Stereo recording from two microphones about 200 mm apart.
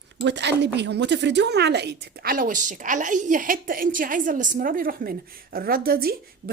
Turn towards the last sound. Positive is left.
turn(degrees=-50)  # may be behind; listen again after turning